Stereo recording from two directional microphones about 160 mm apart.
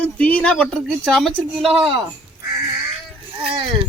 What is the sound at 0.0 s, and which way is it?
A woman's voice, 10° left (ahead or behind).